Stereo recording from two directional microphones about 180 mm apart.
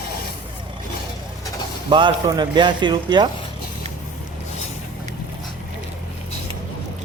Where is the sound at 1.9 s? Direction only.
25° right (ahead or behind).